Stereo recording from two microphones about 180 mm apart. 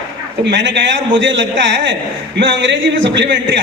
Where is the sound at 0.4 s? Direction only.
80° right.